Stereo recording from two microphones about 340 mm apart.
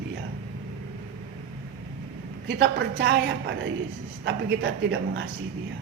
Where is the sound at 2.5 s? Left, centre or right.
Right.